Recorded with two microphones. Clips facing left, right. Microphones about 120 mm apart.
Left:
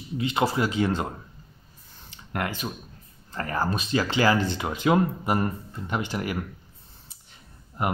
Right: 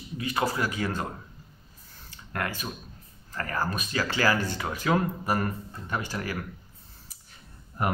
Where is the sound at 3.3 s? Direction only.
25° left (ahead or behind).